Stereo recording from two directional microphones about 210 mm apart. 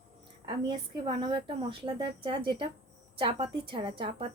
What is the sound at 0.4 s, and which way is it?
Speech, 20° right (ahead or behind).